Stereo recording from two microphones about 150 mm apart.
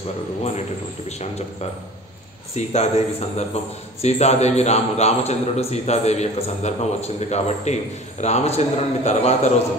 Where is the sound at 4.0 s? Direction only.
50° left (ahead or behind).